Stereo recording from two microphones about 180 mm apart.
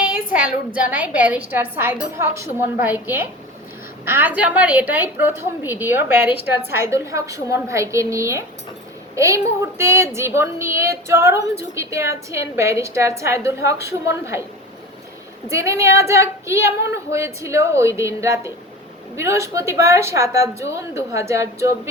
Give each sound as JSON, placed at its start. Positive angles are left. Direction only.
{"t": 0.9, "sound": "a woman's voice", "side_deg": -10}
{"t": 15.4, "sound": "a woman's voice", "side_deg": -15}